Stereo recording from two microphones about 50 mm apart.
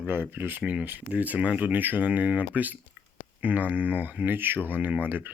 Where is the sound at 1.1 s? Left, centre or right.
Right.